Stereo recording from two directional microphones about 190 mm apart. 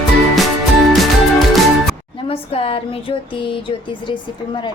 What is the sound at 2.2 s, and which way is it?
Speech, 30° left (ahead or behind).